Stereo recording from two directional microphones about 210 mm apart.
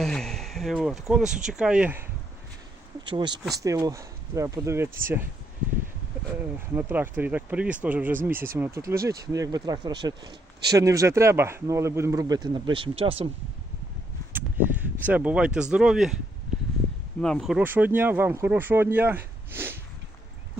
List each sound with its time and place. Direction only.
0.0 s speech: centre (ahead or behind)
3.1 s speech: 20° right (ahead or behind)
6.7 s speech: 10° right (ahead or behind); by 13.2 s 25° right (ahead or behind)
14.3 s speech: 10° right (ahead or behind)
17.2 s speech: 5° left (ahead or behind)